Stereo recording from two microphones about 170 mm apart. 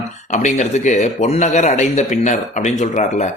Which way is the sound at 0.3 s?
45° left (ahead or behind).